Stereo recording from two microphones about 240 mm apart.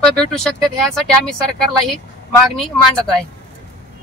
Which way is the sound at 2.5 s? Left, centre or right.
Centre.